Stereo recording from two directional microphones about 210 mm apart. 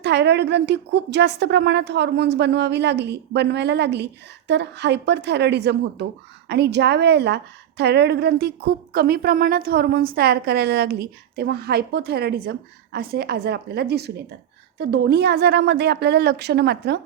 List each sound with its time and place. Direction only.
0.0 s a woman's voice: 55° right (ahead or behind)